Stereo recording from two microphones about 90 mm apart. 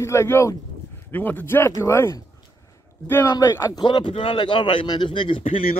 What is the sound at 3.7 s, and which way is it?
Speech, 60° left (ahead or behind).